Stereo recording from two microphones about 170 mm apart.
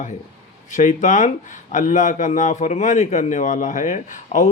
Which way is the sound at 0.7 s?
45° left (ahead or behind).